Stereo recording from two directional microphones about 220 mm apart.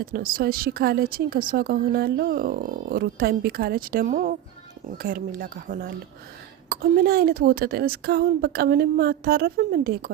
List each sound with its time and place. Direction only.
0.0 s a woman's voice: 40° right (ahead or behind)